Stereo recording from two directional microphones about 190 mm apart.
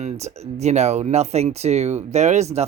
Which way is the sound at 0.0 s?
35° right (ahead or behind).